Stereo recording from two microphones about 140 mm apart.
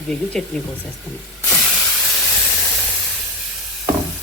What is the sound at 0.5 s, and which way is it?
Speech, 5° left (ahead or behind).